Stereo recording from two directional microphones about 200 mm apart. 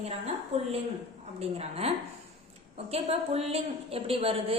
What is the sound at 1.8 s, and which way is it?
A woman's voice, 30° right (ahead or behind).